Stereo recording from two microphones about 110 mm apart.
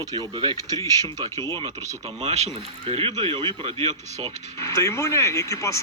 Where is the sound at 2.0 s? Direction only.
75° right (ahead or behind).